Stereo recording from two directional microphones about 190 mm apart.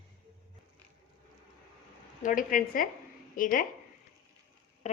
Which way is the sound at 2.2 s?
45° left (ahead or behind).